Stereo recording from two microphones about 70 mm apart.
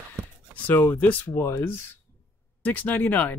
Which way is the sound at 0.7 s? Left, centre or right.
Left.